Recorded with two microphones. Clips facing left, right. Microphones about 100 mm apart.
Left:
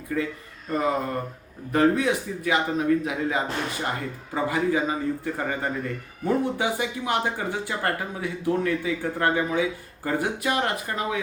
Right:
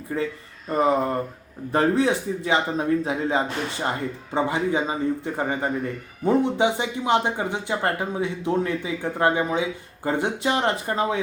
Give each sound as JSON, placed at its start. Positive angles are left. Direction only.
{"t": 0.1, "sound": "speech", "side_deg": -25}